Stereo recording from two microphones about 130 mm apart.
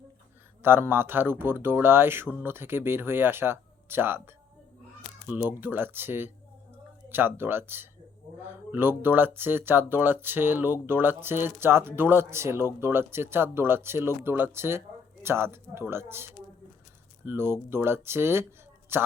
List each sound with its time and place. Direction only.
0.6 s speech: 15° right (ahead or behind)